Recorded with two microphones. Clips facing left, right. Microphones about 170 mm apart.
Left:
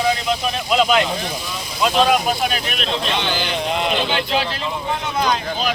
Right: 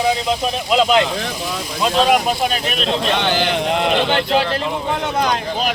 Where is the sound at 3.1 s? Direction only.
60° right (ahead or behind).